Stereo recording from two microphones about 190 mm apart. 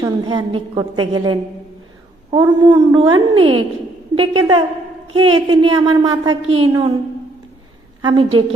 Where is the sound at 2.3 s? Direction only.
25° right (ahead or behind).